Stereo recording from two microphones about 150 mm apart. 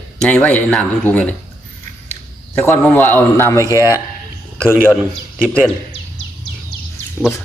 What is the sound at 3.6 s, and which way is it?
Speech, 20° right (ahead or behind).